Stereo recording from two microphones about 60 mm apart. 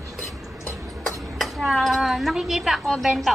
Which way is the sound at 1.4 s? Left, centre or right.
Centre.